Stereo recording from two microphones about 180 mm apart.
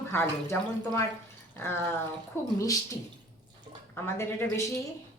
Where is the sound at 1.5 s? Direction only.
15° left (ahead or behind).